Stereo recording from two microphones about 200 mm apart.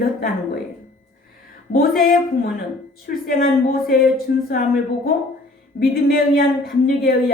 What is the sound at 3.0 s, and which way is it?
Speech, 50° left (ahead or behind).